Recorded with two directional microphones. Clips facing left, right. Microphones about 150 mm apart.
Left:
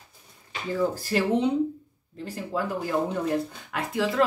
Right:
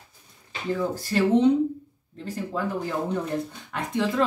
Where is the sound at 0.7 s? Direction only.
10° left (ahead or behind).